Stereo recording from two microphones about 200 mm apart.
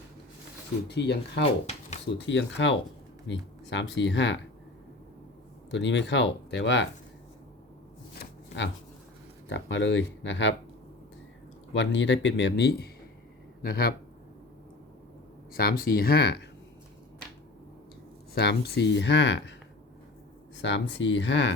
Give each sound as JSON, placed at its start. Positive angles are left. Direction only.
{"t": 0.9, "sound": "speech", "side_deg": 60}
{"t": 5.7, "sound": "speech", "side_deg": 60}
{"t": 8.2, "sound": "shuffling cards", "side_deg": 65}
{"t": 9.5, "sound": "speech", "side_deg": 65}
{"t": 11.7, "sound": "speech", "side_deg": 65}
{"t": 15.5, "sound": "speech", "side_deg": 45}
{"t": 18.3, "sound": "speech", "side_deg": 55}
{"t": 20.6, "sound": "speech", "side_deg": 65}